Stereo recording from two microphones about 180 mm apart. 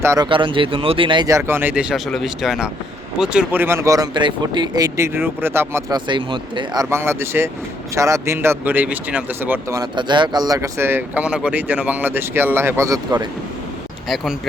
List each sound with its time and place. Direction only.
0.0 s speech: 15° right (ahead or behind)
0.3 s speech: 30° right (ahead or behind)
6.1 s speech: 25° right (ahead or behind)
6.9 s speech: 15° right (ahead or behind)